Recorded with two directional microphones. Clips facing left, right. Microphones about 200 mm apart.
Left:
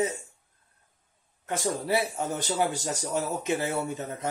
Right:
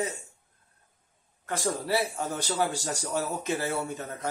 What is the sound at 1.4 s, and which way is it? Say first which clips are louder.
Speech: left 1 dB; 20° left (ahead or behind).